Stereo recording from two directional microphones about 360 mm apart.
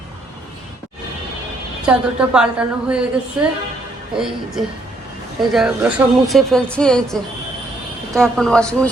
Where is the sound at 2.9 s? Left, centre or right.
Centre.